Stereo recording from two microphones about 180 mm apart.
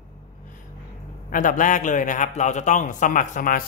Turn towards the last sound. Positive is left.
turn(degrees=50)  # may be behind; listen again after turning